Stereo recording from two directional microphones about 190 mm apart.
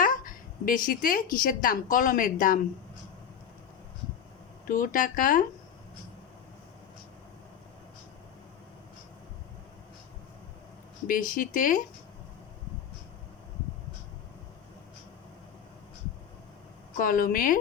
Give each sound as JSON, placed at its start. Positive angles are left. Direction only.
{"t": 0.0, "sound": "a woman's voice", "side_deg": 45}
{"t": 4.6, "sound": "speech", "side_deg": 45}
{"t": 11.0, "sound": "speech", "side_deg": 45}
{"t": 17.0, "sound": "speech", "side_deg": 45}